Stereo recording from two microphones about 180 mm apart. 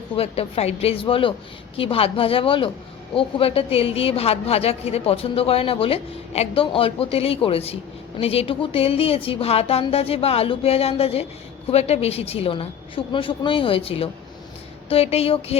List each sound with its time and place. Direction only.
0.2 s a woman's voice: 35° left (ahead or behind)